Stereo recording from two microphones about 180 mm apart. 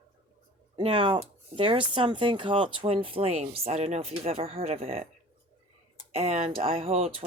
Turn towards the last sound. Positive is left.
turn(degrees=-35)  # may be behind; listen again after turning